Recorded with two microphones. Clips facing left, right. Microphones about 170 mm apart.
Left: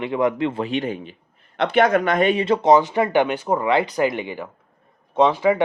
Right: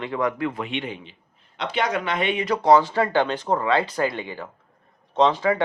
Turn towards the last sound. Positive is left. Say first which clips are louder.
# left 3 dB
turn(degrees=10)  # may be behind; listen again after turning